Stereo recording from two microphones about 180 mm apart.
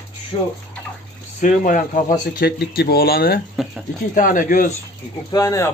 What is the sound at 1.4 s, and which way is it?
Speech, 50° left (ahead or behind).